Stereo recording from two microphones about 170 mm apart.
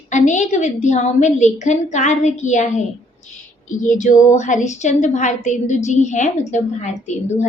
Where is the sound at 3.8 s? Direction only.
45° left (ahead or behind).